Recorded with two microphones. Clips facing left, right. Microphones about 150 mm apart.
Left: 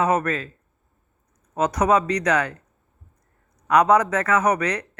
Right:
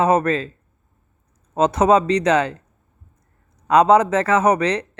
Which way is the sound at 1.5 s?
25° right (ahead or behind).